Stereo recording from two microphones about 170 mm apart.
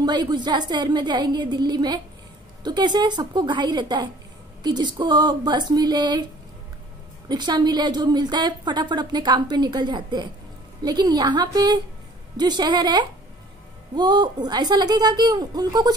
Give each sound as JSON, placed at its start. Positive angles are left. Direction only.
{"t": 0.0, "sound": "a woman's voice", "side_deg": -25}
{"t": 7.2, "sound": "a woman's voice", "side_deg": -25}